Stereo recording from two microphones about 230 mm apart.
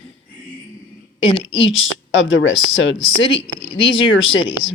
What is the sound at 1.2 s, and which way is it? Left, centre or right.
Speech, left.